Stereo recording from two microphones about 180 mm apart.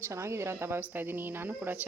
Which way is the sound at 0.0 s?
15° right (ahead or behind).